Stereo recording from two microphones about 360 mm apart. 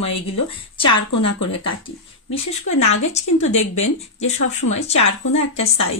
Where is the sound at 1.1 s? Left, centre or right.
Left.